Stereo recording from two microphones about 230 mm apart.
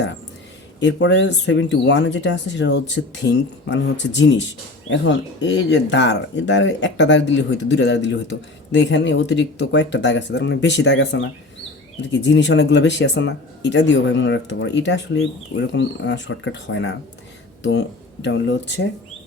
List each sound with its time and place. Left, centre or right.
0.8 s speech: left